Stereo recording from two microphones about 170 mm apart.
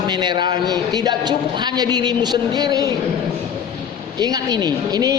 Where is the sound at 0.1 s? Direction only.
25° right (ahead or behind).